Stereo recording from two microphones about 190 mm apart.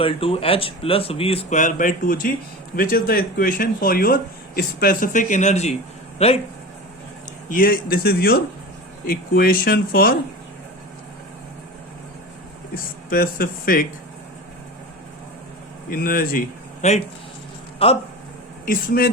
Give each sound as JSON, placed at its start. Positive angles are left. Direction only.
{"t": 0.0, "sound": "speech", "side_deg": 30}
{"t": 7.5, "sound": "speech", "side_deg": 50}
{"t": 12.7, "sound": "speech", "side_deg": 50}
{"t": 15.9, "sound": "speech", "side_deg": 50}
{"t": 16.8, "sound": "speech", "side_deg": 35}
{"t": 18.6, "sound": "speech", "side_deg": 50}